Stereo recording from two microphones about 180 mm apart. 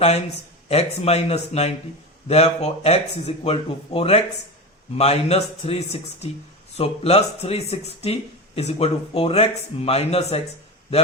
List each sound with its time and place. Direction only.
0.7 s speech: 35° left (ahead or behind)